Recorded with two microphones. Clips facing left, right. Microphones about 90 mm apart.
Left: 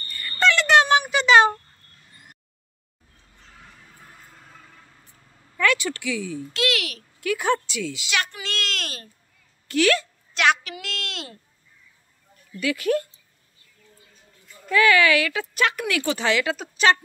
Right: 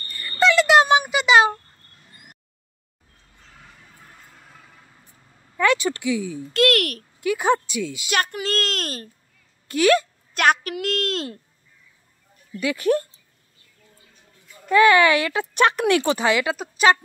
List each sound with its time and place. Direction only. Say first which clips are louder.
0.1 s a sound: right 3 dB; 10° right (ahead or behind)
4.1 s vehicle: even; centre (ahead or behind)
5.6 s speech: right 3 dB; 25° right (ahead or behind)
6.5 s a woman's voice: right 8 dB; 50° right (ahead or behind)
7.2 s a woman's voice: right 3 dB; 20° right (ahead or behind)
8.1 s a child's voice: right 7 dB; 45° right (ahead or behind)
9.7 s speech: right 3 dB; 20° right (ahead or behind)
10.3 s a woman's voice: right 2 dB; 45° right (ahead or behind)
12.6 s a child's voice: right 2 dB; 30° right (ahead or behind)
14.7 s a child's voice: right 3 dB; 30° right (ahead or behind)
16.2 s speech: right 2 dB; 15° right (ahead or behind)